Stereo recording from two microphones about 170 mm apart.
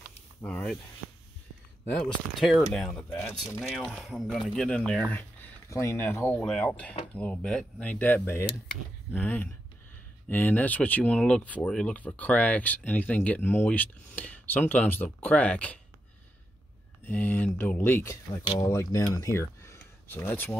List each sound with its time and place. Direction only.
0.4 s speech: 10° left (ahead or behind)
2.0 s speech: centre (ahead or behind)
17.1 s speech: 10° left (ahead or behind)